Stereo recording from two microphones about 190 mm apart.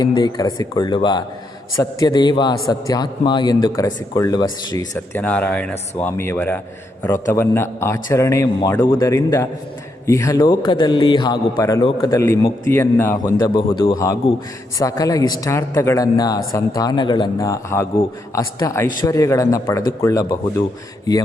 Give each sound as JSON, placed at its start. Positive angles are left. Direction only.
{"t": 0.0, "sound": "speech", "side_deg": 20}
{"t": 5.1, "sound": "a man's voice", "side_deg": 10}
{"t": 13.5, "sound": "a man's voice", "side_deg": 25}